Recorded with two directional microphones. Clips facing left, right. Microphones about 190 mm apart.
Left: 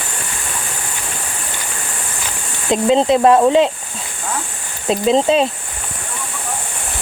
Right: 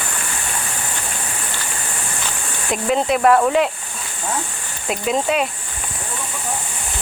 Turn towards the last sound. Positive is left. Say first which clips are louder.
# left 6 dB
turn(degrees=30)  # may be behind; listen again after turning